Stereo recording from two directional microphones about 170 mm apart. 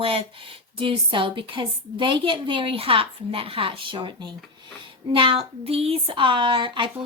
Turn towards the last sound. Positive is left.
turn(degrees=-30)  # may be behind; listen again after turning